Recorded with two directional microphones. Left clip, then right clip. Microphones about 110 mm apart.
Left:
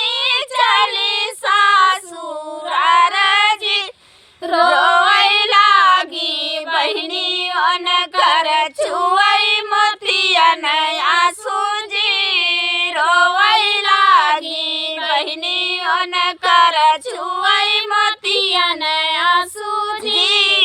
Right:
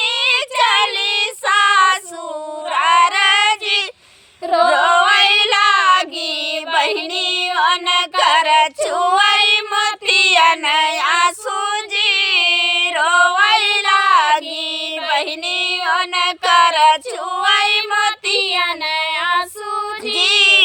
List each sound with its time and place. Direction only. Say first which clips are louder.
0.0 s child singing: right 1 dB; 30° right (ahead or behind)
4.4 s singing: even; 10° left (ahead or behind)
4.7 s child singing: left 1 dB; 30° right (ahead or behind)
14.1 s female singing: left 1 dB; 30° right (ahead or behind)
15.1 s child singing: even; 30° right (ahead or behind)
18.3 s child singing: left 1 dB; 10° left (ahead or behind)
20.1 s child singing: right 2 dB; 30° right (ahead or behind)